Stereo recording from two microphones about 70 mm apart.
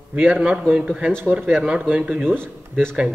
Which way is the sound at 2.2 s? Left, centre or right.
Right.